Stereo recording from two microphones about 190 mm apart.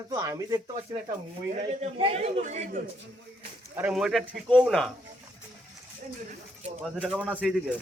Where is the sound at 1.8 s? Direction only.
30° right (ahead or behind).